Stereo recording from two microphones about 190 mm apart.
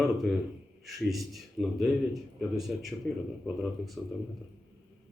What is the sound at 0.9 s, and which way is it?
Speech, centre (ahead or behind).